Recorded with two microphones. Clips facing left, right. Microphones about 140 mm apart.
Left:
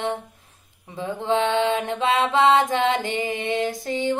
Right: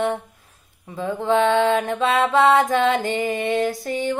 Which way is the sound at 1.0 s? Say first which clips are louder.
Right 3 dB; 50° right (ahead or behind).